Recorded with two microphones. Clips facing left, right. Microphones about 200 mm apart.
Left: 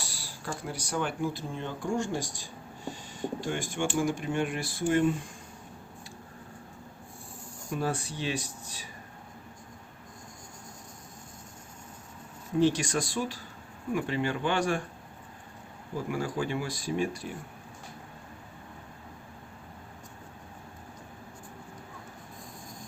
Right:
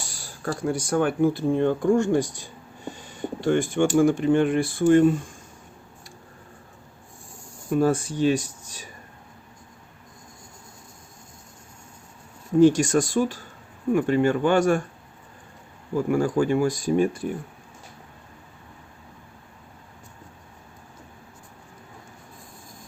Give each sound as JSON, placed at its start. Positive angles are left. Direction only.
{"t": 0.1, "sound": "a sound", "side_deg": -50}
{"t": 0.7, "sound": "speech", "side_deg": -50}
{"t": 7.7, "sound": "speech", "side_deg": -45}
{"t": 12.5, "sound": "speech", "side_deg": -45}
{"t": 16.0, "sound": "speech", "side_deg": -50}